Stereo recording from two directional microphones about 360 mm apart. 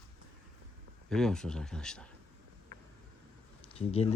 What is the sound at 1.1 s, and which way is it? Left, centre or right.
Speech, centre.